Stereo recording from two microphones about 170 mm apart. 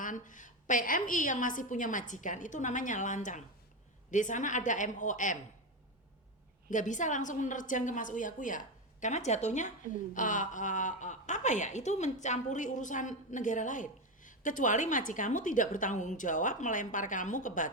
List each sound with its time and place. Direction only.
0.0 s a woman's voice: 50° left (ahead or behind)
6.7 s a woman's voice: 45° left (ahead or behind)